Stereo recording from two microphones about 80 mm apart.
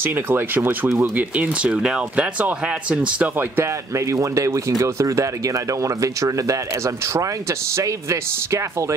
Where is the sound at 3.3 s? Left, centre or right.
Right.